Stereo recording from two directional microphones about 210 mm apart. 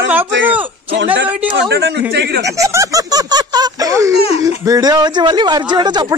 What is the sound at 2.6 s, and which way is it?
Speech, 15° right (ahead or behind).